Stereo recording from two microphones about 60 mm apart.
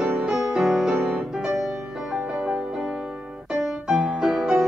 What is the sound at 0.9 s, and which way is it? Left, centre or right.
Music, centre.